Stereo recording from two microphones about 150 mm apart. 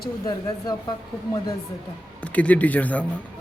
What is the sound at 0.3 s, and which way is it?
A woman's voice, 25° left (ahead or behind).